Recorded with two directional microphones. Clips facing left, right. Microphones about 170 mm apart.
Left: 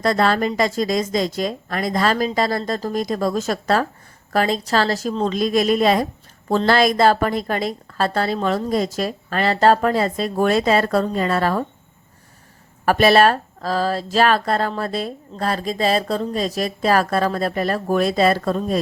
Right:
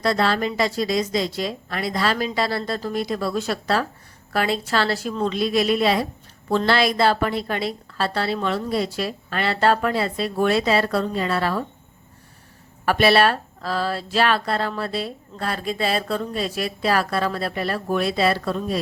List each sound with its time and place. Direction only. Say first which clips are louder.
0.0 s a woman's voice: left 3 dB; 45° left (ahead or behind)
12.8 s a woman's voice: left 3 dB; 40° left (ahead or behind)